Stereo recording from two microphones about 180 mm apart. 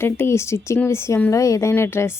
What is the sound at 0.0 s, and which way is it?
Speech, 15° left (ahead or behind).